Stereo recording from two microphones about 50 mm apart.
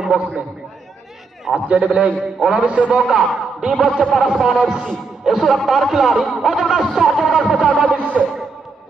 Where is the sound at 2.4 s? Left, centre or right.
Centre.